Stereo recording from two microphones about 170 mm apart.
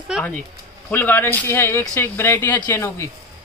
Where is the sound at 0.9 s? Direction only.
10° left (ahead or behind).